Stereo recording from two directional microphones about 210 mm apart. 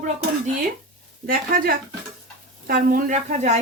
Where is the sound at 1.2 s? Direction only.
40° right (ahead or behind).